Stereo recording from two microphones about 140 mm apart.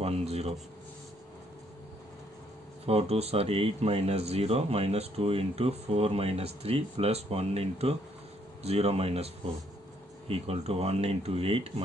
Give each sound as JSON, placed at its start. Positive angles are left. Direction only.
{"t": 0.0, "sound": "speech", "side_deg": -45}
{"t": 2.9, "sound": "speech", "side_deg": -45}